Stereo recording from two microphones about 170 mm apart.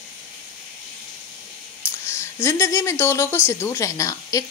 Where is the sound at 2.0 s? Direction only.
15° left (ahead or behind).